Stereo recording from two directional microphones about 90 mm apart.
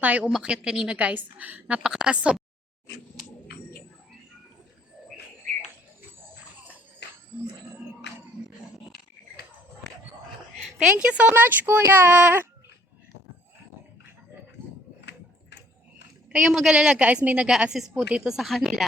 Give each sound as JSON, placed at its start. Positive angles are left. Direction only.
{"t": 0.0, "sound": "a woman's voice", "side_deg": -15}
{"t": 10.6, "sound": "a sound", "side_deg": -5}
{"t": 10.9, "sound": "speech", "side_deg": -15}
{"t": 16.3, "sound": "a woman's voice", "side_deg": -10}